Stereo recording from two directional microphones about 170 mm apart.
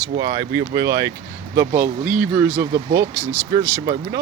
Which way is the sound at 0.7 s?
20° right (ahead or behind).